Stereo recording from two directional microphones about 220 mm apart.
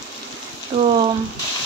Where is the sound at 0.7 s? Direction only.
25° right (ahead or behind).